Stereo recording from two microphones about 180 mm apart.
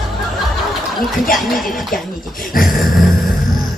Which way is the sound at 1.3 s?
Centre (ahead or behind).